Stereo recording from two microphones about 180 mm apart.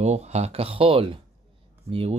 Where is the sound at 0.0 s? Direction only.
40° right (ahead or behind).